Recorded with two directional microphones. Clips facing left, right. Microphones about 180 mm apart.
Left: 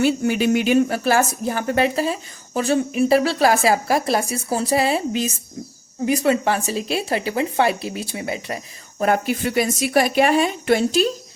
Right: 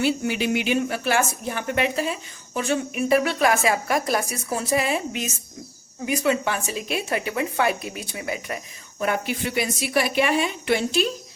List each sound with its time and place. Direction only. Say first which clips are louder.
0.0 s speech: left 5 dB; 45° left (ahead or behind); by 8.5 s 30° left (ahead or behind)
9.0 s speech: left 5 dB; 40° left (ahead or behind)